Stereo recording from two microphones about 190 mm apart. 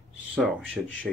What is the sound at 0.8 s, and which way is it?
Speech, 5° right (ahead or behind).